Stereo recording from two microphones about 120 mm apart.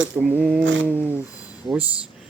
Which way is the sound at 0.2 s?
15° right (ahead or behind).